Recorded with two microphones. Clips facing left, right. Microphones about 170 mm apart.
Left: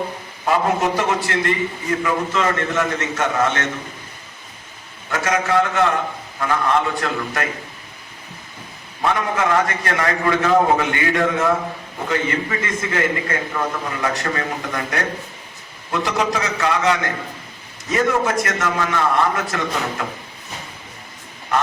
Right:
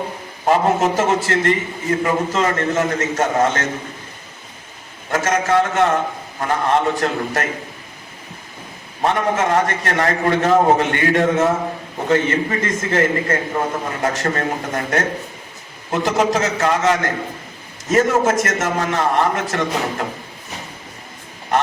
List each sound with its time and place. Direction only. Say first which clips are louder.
0.4 s a man's voice: right 3 dB; 40° right (ahead or behind)
5.1 s a man's voice: right 2 dB; 45° right (ahead or behind)
9.0 s a man's voice: right 2 dB; 40° right (ahead or behind)